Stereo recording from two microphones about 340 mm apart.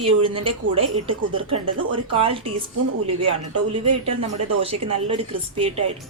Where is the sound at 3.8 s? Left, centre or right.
Centre.